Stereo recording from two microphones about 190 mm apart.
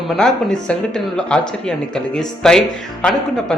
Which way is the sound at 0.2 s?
5° left (ahead or behind).